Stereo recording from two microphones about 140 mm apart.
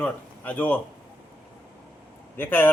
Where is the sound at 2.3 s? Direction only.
15° left (ahead or behind).